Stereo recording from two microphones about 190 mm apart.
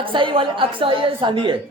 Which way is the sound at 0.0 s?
25° right (ahead or behind).